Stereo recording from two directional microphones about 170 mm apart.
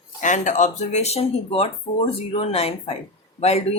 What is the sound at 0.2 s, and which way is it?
Speech, 45° left (ahead or behind).